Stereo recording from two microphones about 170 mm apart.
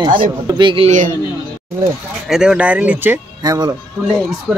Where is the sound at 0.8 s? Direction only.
50° right (ahead or behind).